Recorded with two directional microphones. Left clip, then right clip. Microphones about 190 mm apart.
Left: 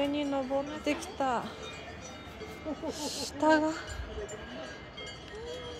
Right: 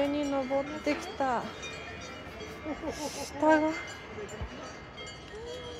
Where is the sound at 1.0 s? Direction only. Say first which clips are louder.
Right 1 dB; 10° left (ahead or behind).